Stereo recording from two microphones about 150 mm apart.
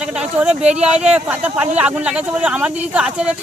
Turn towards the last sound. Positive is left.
turn(degrees=-5)  # may be behind; listen again after turning